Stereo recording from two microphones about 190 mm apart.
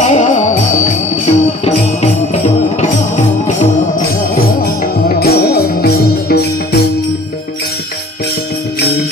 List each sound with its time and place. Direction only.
0.0 s music: 40° left (ahead or behind)
4.4 s music: 50° left (ahead or behind)